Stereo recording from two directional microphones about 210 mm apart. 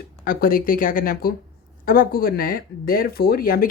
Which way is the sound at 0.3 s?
40° left (ahead or behind).